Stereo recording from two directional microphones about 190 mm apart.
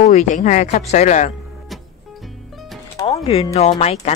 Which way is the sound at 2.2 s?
Centre (ahead or behind).